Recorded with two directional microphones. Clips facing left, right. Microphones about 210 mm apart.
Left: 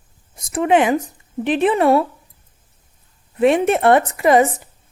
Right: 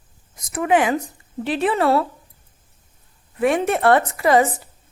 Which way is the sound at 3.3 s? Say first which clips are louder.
Left 4 dB; 25° left (ahead or behind).